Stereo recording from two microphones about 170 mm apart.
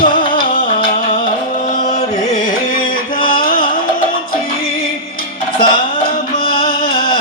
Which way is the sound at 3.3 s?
60° left (ahead or behind).